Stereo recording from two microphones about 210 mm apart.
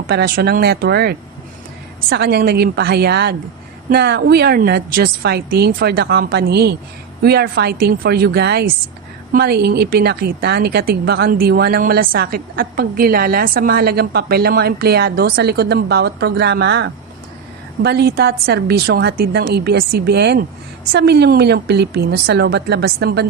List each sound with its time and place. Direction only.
0.1 s a woman's voice: 50° right (ahead or behind)